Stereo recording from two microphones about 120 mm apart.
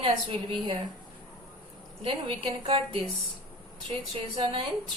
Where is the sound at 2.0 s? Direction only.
45° right (ahead or behind).